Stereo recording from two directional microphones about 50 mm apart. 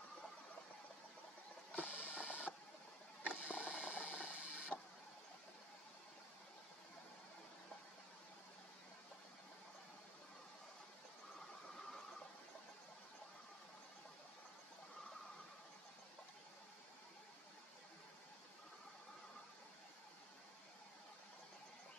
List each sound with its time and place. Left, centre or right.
1.7 s music: left
2.1 s a sound: left
4.7 s printer: left